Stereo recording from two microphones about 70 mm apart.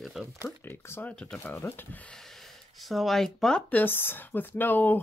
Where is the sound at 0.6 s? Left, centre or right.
Left.